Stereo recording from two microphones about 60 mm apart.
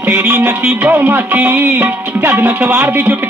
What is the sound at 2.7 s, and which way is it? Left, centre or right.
Speech, right.